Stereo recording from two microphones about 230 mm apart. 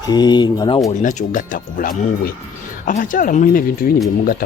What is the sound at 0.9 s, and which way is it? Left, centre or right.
Speech, left.